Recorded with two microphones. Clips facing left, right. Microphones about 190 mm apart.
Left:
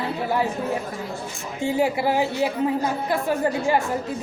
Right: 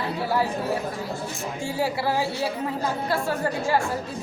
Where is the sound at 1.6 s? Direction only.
20° left (ahead or behind).